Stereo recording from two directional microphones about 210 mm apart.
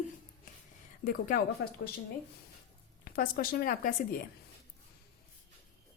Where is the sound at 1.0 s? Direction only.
45° left (ahead or behind).